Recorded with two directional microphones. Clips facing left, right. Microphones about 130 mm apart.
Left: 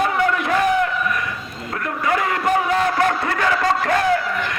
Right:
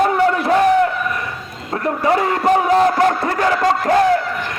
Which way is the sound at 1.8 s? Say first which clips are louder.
Right 5 dB; 35° right (ahead or behind).